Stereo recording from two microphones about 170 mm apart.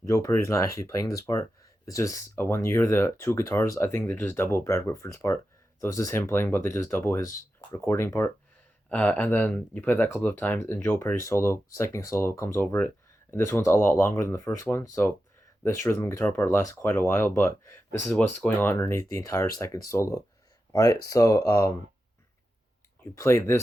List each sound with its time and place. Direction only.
0.1 s speech: 15° left (ahead or behind)
23.1 s speech: 15° left (ahead or behind)